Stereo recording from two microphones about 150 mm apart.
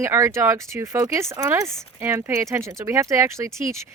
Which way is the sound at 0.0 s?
20° right (ahead or behind).